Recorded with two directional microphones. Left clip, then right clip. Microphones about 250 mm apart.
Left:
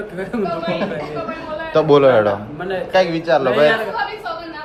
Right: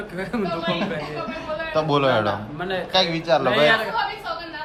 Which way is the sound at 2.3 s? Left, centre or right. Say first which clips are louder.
Left 4 dB; centre.